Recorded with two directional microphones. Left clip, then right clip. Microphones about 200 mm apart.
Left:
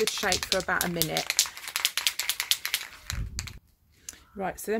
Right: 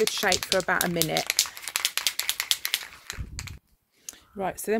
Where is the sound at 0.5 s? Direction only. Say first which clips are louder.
Right 3 dB; 40° right (ahead or behind).